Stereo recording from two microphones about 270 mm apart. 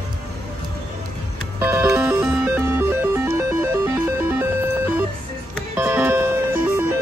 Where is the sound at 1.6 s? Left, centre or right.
Centre.